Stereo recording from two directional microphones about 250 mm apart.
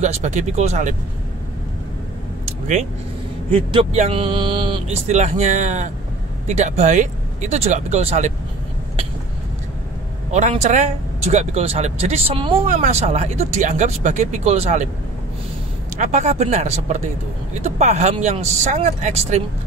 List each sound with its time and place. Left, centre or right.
0.0 s speech: right
3.5 s speech: right
10.3 s speech: right
16.0 s speech: right